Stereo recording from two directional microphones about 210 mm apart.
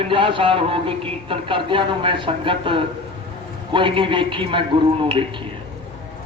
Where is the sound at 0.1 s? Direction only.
25° right (ahead or behind).